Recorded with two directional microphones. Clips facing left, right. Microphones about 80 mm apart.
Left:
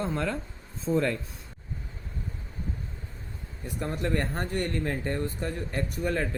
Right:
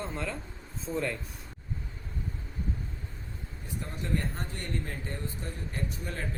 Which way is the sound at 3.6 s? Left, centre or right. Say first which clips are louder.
Left 7 dB; left.